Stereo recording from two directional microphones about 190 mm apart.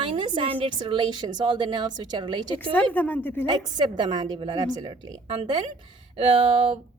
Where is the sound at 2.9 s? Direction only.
10° left (ahead or behind).